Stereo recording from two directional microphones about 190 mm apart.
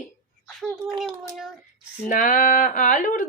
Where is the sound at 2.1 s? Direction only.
45° left (ahead or behind).